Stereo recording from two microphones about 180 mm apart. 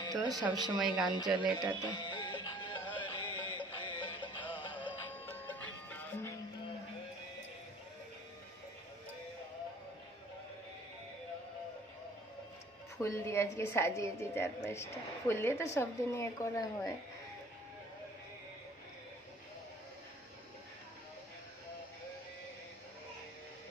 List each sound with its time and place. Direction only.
0.2 s speech: centre (ahead or behind)
1.8 s music: 25° left (ahead or behind)
5.1 s music: 10° left (ahead or behind)
13.0 s a woman's voice: 15° left (ahead or behind)